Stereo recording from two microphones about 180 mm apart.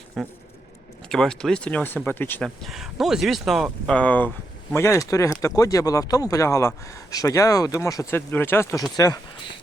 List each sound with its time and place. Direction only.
0.2 s speech: centre (ahead or behind); by 9.2 s 20° left (ahead or behind)